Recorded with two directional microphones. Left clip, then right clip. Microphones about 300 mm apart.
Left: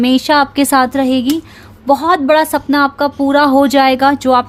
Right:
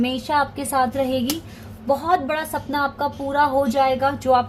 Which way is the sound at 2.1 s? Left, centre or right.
Left.